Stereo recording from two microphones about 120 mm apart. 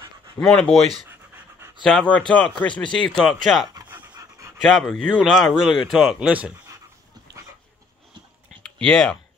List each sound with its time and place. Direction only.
0.4 s speech: 5° left (ahead or behind)
4.1 s dog: 25° right (ahead or behind)
4.6 s speech: centre (ahead or behind)
8.6 s speech: 5° left (ahead or behind)